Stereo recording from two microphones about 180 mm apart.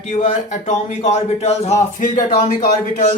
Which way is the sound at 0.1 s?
40° left (ahead or behind).